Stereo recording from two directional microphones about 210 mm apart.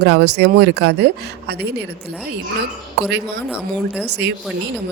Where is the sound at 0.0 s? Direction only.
50° right (ahead or behind).